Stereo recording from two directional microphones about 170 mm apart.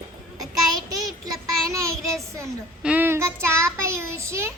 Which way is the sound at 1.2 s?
20° right (ahead or behind).